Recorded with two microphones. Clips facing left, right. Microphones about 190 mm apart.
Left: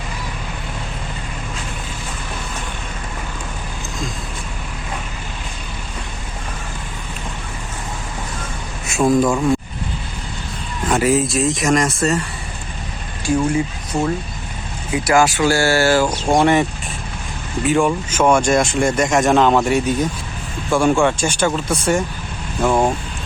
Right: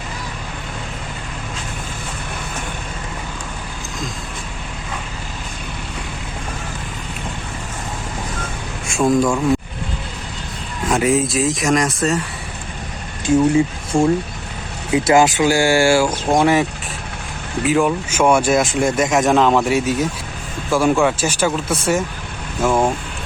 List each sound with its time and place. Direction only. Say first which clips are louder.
8.9 s speech: left 1 dB; 5° left (ahead or behind)
10.8 s speech: even; centre (ahead or behind)
13.2 s speech: right 4 dB; 25° right (ahead or behind); by 16.6 s centre (ahead or behind)
17.7 s speech: even; centre (ahead or behind)